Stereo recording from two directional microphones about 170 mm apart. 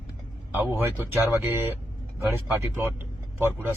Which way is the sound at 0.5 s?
15° right (ahead or behind).